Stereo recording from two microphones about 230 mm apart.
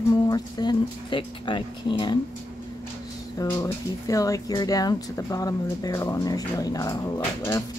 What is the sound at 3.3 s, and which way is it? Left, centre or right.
Speech, centre.